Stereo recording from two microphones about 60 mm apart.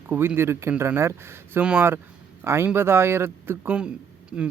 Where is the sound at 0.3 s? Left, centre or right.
Right.